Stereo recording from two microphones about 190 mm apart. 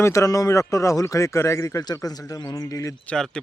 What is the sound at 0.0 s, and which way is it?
A man's voice, 15° left (ahead or behind).